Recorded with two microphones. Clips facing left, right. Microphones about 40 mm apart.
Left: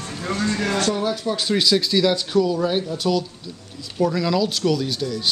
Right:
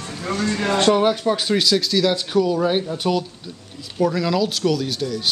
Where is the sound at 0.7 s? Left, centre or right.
Right.